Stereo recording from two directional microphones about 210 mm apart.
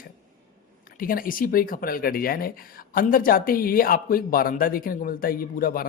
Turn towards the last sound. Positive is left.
turn(degrees=45)  # may be behind; listen again after turning